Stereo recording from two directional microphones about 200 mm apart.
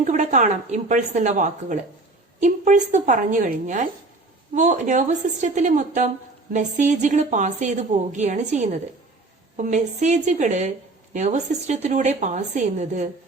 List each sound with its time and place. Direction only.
0.0 s a woman's voice: 40° right (ahead or behind)